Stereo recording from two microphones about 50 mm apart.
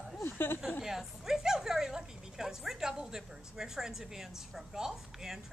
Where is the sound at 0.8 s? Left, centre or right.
Centre.